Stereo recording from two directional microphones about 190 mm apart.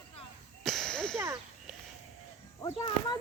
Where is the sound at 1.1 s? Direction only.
15° right (ahead or behind).